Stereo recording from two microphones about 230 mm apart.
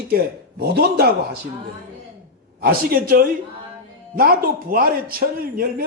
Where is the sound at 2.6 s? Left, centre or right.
Right.